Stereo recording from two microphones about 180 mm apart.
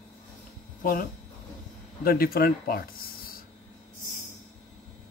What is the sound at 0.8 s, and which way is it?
Speech, 50° left (ahead or behind).